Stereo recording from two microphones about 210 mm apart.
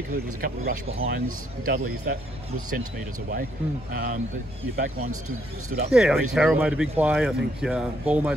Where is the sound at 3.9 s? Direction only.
45° right (ahead or behind).